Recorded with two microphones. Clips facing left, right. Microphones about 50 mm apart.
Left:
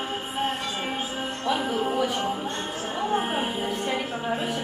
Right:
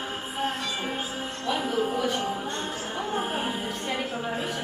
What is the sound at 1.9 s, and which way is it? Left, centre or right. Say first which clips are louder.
Speech: left 2 dB; centre.